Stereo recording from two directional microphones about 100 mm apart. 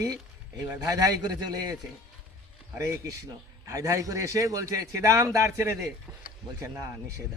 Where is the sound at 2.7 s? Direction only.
30° right (ahead or behind).